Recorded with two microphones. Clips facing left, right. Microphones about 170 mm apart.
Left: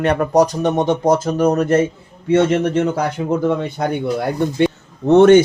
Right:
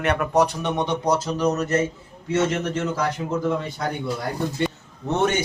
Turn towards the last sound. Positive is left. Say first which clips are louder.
# left 14 dB
turn(degrees=65)  # may be behind; listen again after turning